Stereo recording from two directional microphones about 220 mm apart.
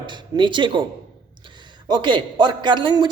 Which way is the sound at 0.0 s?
20° right (ahead or behind).